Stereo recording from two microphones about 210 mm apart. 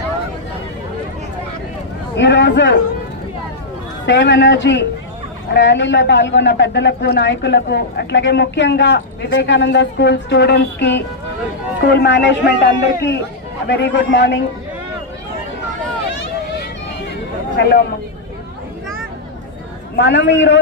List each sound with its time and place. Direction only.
2.1 s a man's voice: 55° left (ahead or behind)
4.0 s a man's voice: 55° left (ahead or behind)
20.0 s a man's voice: 55° left (ahead or behind)